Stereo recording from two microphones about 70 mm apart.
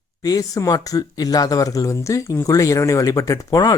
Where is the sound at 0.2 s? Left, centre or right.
Left.